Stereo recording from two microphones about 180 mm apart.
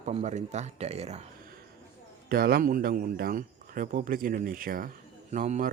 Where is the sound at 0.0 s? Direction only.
35° right (ahead or behind).